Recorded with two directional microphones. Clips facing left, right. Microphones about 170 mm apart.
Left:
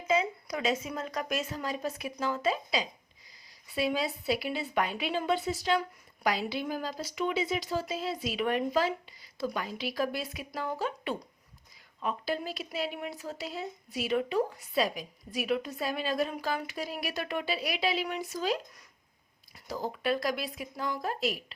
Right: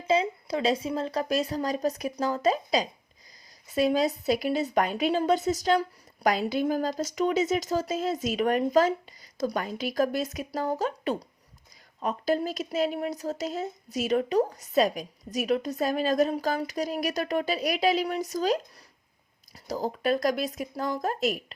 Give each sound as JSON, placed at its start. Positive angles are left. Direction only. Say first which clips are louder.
{"t": 0.1, "sound": "a woman's voice", "louder": "right 4 dB", "side_deg": -30}